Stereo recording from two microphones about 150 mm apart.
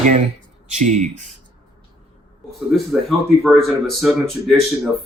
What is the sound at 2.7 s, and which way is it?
Speech, centre (ahead or behind).